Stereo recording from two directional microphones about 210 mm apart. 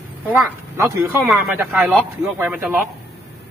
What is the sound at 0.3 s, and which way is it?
Speech, 10° right (ahead or behind).